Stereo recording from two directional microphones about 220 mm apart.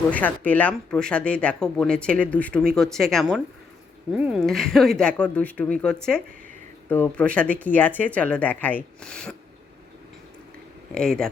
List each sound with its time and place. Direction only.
0.1 s speech: 5° left (ahead or behind)
10.9 s speech: 5° left (ahead or behind)